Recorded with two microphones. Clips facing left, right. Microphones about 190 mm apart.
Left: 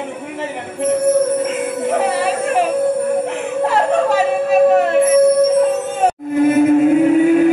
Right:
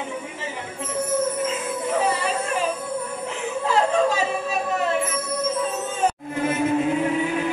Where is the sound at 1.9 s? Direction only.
55° left (ahead or behind).